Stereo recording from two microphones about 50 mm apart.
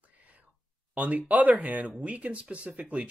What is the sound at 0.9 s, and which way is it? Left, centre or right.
Speech, right.